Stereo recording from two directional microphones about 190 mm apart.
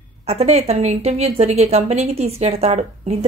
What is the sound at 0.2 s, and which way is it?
Speech, 35° right (ahead or behind).